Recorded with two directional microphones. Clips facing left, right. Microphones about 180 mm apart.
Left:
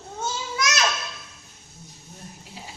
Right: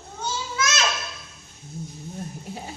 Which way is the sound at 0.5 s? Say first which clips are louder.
Right 1 dB; 15° left (ahead or behind).